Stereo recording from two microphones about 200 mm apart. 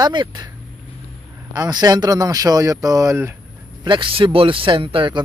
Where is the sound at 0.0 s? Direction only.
20° right (ahead or behind).